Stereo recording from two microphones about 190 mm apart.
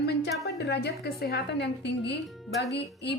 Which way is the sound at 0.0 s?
60° left (ahead or behind).